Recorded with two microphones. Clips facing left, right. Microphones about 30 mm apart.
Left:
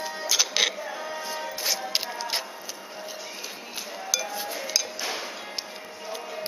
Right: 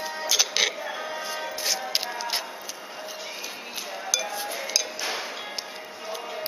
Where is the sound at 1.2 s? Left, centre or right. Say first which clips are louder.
Even; centre.